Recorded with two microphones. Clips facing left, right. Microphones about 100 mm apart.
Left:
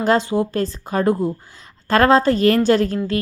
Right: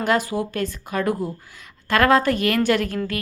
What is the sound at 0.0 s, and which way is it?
A woman's voice, 30° left (ahead or behind).